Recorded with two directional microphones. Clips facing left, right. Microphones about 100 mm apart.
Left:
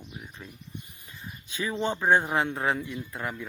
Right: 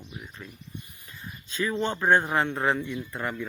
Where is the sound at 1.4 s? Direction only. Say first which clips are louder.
Right 1 dB; 15° left (ahead or behind).